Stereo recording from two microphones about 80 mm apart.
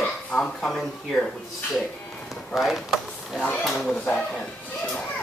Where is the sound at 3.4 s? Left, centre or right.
Left.